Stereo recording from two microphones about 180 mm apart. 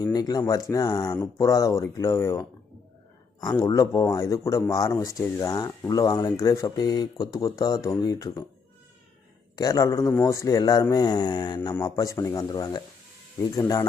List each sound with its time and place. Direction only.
0.0 s speech: 20° left (ahead or behind)
3.6 s speech: 20° left (ahead or behind)
9.6 s speech: 20° left (ahead or behind)